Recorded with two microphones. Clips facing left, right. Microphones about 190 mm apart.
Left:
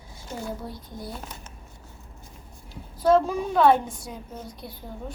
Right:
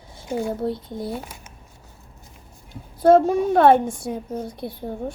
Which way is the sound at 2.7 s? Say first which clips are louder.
Right 5 dB; 55° right (ahead or behind).